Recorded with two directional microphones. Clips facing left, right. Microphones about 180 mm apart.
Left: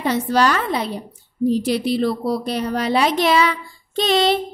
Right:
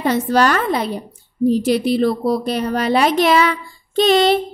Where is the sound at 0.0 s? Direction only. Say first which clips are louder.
Right 2 dB; 50° right (ahead or behind).